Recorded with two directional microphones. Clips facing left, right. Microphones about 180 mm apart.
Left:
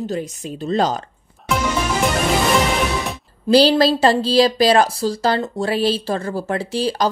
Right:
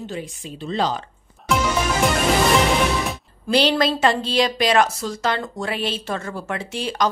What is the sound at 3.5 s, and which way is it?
Speech, 35° left (ahead or behind).